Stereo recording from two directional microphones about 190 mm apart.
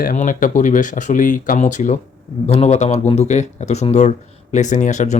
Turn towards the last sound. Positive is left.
turn(degrees=40)  # may be behind; listen again after turning